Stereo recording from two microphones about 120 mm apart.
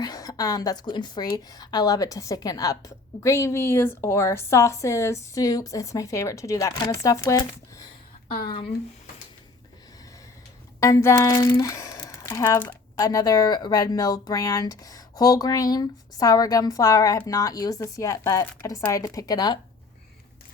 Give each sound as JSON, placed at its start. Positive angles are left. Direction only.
{"t": 0.0, "sound": "speech", "side_deg": 30}
{"t": 10.8, "sound": "speech", "side_deg": 25}